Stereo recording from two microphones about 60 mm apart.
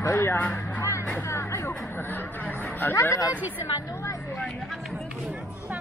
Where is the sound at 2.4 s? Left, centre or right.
Left.